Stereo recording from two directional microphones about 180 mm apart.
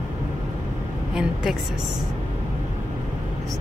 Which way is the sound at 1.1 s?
5° right (ahead or behind).